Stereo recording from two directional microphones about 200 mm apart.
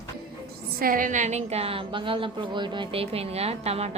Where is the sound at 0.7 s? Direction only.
45° right (ahead or behind).